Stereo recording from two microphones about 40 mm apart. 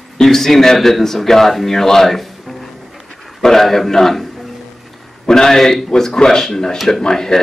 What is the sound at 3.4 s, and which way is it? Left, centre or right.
Speech, centre.